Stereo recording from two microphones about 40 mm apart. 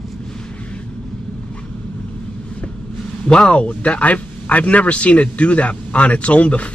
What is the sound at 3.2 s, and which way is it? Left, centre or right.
A man's voice, left.